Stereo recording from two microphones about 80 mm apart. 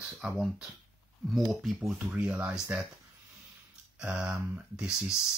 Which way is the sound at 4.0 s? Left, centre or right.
Centre.